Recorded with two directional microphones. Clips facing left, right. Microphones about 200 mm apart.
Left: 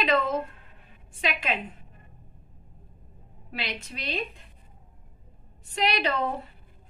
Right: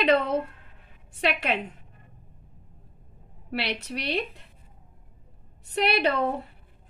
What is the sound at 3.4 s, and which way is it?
Speech, 65° right (ahead or behind).